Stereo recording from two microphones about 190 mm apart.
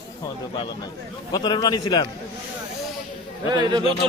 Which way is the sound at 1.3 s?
20° left (ahead or behind).